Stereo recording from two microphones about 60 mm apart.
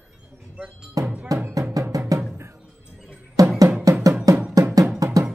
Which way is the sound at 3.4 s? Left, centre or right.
Right.